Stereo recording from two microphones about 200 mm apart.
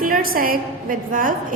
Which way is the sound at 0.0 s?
45° right (ahead or behind).